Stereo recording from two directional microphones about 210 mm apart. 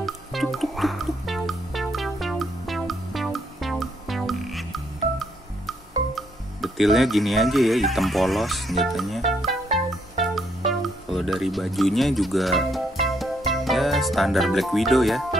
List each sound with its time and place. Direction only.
0.0 s music: centre (ahead or behind)